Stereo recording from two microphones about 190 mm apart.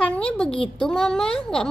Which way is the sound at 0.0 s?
5° left (ahead or behind).